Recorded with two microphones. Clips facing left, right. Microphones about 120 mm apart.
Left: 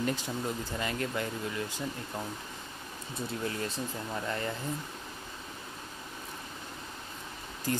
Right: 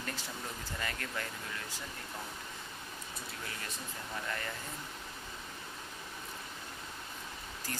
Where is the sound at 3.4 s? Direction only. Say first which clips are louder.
Left 12 dB; 30° left (ahead or behind).